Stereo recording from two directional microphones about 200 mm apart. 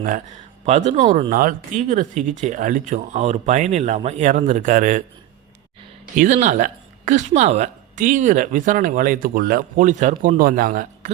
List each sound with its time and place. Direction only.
0.6 s speech: 35° right (ahead or behind)
6.1 s speech: 35° right (ahead or behind)